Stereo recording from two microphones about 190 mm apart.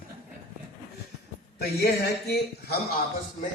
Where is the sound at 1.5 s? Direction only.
60° left (ahead or behind).